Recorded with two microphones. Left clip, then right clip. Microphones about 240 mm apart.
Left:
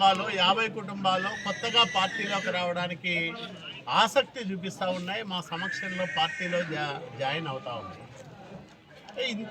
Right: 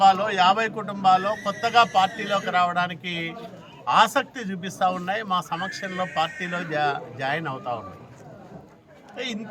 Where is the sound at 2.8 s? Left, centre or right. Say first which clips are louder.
Right 1 dB; right.